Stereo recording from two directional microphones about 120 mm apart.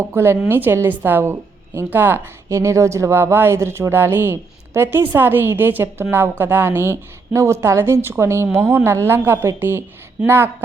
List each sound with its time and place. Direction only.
0.0 s a woman's voice: 20° right (ahead or behind)